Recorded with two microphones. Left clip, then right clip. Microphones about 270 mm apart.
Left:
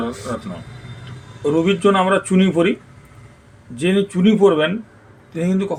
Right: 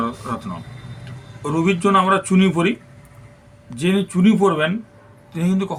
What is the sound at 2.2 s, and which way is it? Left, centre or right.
Speech, right.